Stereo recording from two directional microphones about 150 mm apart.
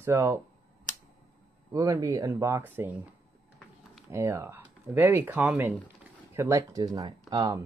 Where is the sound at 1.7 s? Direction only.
20° right (ahead or behind).